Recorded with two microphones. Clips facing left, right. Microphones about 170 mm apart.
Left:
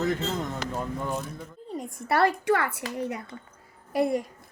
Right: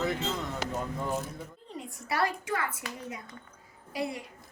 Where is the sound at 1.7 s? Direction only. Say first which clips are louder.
Left 7 dB; 55° left (ahead or behind); by 2.8 s 70° left (ahead or behind).